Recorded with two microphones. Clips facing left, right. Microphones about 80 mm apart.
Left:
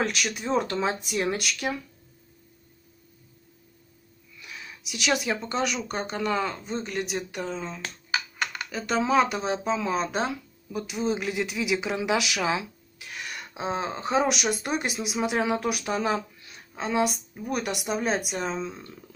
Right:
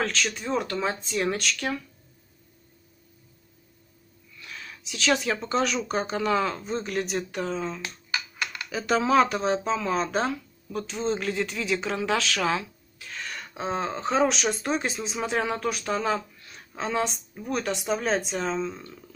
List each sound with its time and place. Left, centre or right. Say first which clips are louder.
0.0 s speech: even; centre
4.4 s a sound: right 1 dB; centre
5.4 s a woman's voice: right 2 dB; centre